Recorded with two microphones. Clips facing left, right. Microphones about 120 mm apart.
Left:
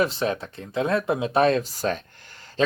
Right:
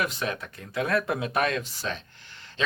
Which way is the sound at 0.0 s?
30° left (ahead or behind).